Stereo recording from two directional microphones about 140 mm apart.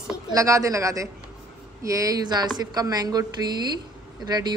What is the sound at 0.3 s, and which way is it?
A woman's voice, 25° right (ahead or behind).